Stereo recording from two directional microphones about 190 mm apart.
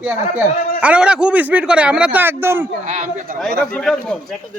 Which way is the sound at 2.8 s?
40° right (ahead or behind).